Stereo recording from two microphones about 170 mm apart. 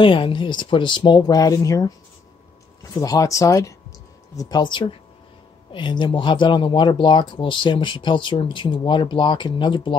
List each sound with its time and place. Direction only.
0.0 s speech: 30° left (ahead or behind)